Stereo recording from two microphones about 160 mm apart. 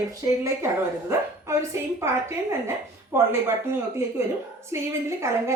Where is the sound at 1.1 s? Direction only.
15° right (ahead or behind).